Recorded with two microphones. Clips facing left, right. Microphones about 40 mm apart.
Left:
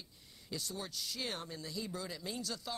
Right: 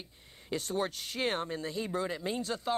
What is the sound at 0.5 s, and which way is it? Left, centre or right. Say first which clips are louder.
Speech: right 10 dB; right.